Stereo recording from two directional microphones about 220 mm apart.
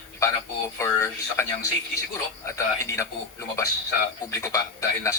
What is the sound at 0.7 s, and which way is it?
A man's voice, 10° left (ahead or behind).